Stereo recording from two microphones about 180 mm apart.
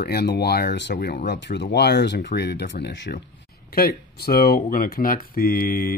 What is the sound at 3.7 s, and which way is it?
Speech, 55° left (ahead or behind).